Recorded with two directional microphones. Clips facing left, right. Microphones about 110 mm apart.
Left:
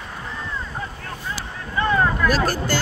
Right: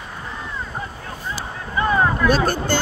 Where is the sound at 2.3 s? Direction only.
25° right (ahead or behind).